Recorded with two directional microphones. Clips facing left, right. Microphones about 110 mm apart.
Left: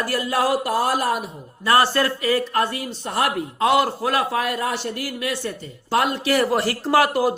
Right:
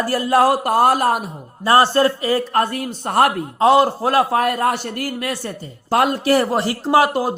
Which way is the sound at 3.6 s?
30° right (ahead or behind).